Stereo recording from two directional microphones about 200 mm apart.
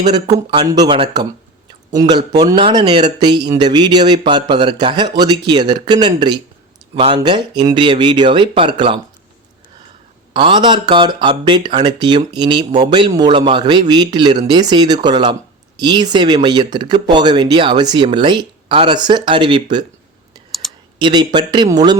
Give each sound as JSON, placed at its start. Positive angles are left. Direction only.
{"t": 0.1, "sound": "speech", "side_deg": -20}
{"t": 10.3, "sound": "speech", "side_deg": -25}
{"t": 20.5, "sound": "computer keyboard", "side_deg": 0}
{"t": 21.0, "sound": "speech", "side_deg": -20}